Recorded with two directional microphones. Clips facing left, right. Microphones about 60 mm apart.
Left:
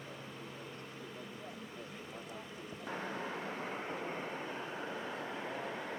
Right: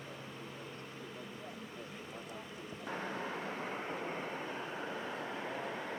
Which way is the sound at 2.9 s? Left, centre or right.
Right.